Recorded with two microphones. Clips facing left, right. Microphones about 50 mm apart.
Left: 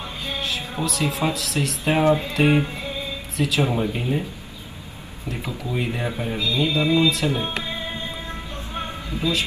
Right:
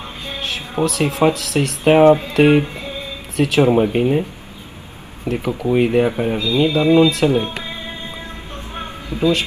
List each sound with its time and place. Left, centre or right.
0.4 s speech: right
5.2 s speech: right
9.2 s speech: right